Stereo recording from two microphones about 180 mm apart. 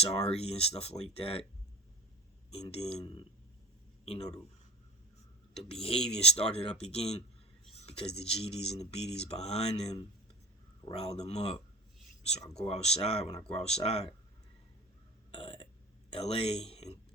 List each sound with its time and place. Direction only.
0.0 s speech: 35° left (ahead or behind)
2.5 s speech: 35° left (ahead or behind)
5.8 s speech: 35° left (ahead or behind)
15.3 s burping: 30° left (ahead or behind)
16.1 s speech: 35° left (ahead or behind)